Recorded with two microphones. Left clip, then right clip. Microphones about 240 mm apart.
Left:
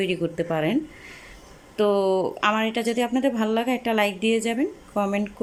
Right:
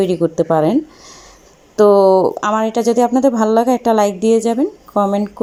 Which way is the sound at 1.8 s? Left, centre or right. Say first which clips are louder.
Right 12 dB; centre.